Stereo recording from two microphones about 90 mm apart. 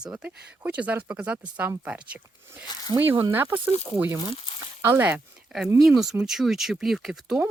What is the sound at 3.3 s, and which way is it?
Speech, 25° right (ahead or behind).